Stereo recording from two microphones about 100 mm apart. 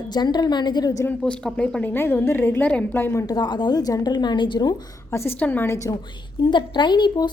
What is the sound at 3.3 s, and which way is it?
A woman's voice, 45° left (ahead or behind).